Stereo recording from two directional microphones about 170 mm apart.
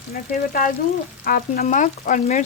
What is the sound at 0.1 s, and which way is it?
Speech, 55° left (ahead or behind).